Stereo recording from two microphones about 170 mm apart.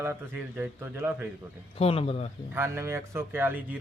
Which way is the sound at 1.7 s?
35° left (ahead or behind).